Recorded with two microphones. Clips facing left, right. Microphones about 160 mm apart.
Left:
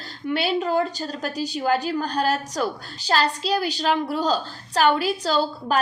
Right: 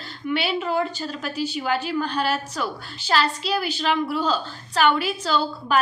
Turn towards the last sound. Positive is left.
turn(degrees=35)  # may be behind; listen again after turning